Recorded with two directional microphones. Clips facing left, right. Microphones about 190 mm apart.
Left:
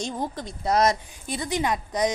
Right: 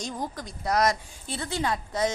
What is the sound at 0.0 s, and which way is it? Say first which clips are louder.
A woman's voice: left 4 dB; 25° left (ahead or behind).